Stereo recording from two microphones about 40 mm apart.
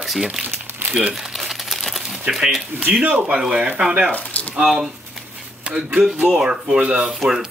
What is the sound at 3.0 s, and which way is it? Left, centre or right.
Speech, right.